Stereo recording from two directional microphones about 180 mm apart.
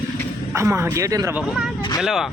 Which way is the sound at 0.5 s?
15° right (ahead or behind).